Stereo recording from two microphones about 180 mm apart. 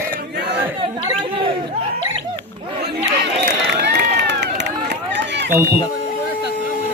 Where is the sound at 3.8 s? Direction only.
65° right (ahead or behind).